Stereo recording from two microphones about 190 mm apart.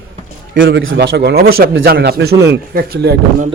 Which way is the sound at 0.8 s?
70° right (ahead or behind).